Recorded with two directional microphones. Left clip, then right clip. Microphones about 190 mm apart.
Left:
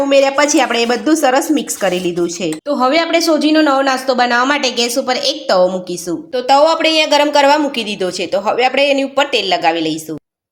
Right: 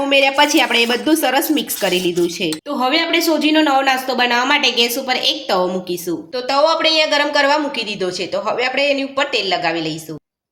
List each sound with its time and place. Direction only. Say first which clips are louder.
0.1 s a woman's voice: left 1 dB; 25° left (ahead or behind)
2.6 s a woman's voice: left 4 dB; 35° left (ahead or behind)